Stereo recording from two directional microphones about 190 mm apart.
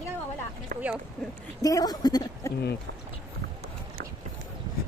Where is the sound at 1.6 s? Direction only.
20° left (ahead or behind).